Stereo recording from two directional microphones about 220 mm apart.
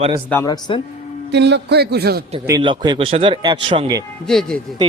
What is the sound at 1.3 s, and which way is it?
Speech, 50° right (ahead or behind).